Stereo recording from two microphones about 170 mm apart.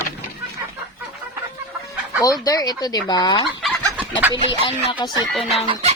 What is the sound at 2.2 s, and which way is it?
Speech, 20° left (ahead or behind).